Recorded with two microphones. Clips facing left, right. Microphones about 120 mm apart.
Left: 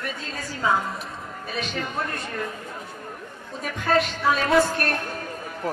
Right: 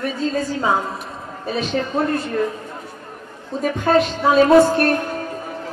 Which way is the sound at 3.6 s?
30° right (ahead or behind).